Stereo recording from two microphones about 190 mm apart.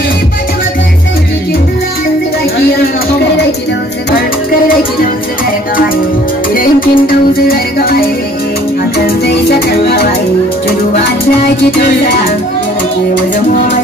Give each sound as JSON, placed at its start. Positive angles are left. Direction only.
{"t": 6.5, "sound": "music", "side_deg": 50}
{"t": 9.0, "sound": "music", "side_deg": 60}